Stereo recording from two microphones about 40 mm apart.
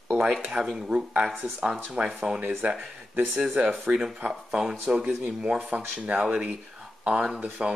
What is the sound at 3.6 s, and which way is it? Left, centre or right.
Speech, right.